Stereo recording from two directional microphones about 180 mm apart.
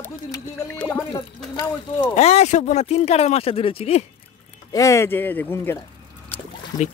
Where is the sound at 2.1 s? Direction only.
35° left (ahead or behind).